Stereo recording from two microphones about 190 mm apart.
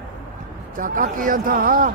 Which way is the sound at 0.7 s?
45° right (ahead or behind).